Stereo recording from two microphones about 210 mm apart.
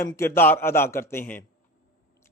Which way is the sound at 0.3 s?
10° left (ahead or behind).